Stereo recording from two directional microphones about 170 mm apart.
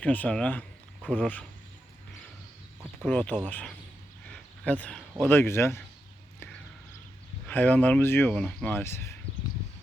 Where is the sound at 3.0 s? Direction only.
10° left (ahead or behind).